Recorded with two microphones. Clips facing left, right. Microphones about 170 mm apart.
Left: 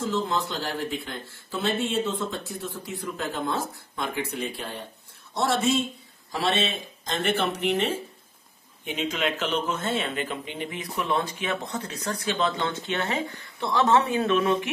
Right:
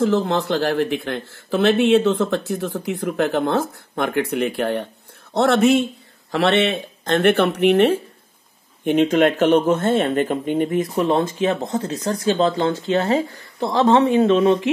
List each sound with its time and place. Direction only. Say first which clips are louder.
0.0 s speech: right 8 dB; 65° right (ahead or behind); by 12.7 s 40° right (ahead or behind)
13.6 s speech: right 6 dB; 30° right (ahead or behind)